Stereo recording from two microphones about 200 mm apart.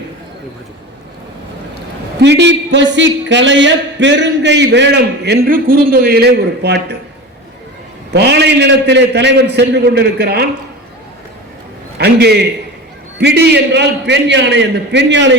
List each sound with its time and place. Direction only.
2.2 s speech: 60° right (ahead or behind)
8.1 s speech: 55° right (ahead or behind)
11.9 s speech: 55° right (ahead or behind)